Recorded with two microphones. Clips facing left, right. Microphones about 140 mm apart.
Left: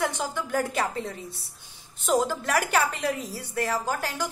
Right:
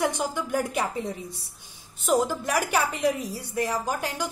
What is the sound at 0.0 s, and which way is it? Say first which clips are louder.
A woman's voice: right 2 dB; 15° right (ahead or behind).